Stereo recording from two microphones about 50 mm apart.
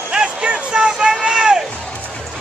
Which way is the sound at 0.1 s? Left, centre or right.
Centre.